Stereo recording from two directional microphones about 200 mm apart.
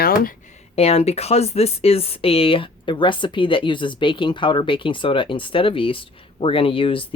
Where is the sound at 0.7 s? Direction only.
30° left (ahead or behind).